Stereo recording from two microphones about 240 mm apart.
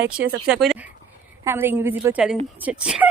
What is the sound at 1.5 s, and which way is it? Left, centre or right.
A woman's voice, centre.